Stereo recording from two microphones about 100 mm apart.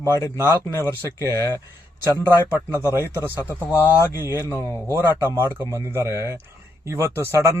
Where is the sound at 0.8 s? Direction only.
30° left (ahead or behind).